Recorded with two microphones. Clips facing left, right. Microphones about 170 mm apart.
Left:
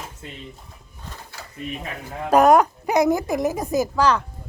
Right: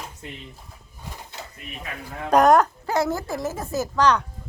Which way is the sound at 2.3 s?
10° left (ahead or behind).